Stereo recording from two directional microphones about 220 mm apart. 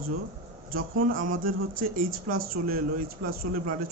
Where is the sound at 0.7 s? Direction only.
40° right (ahead or behind).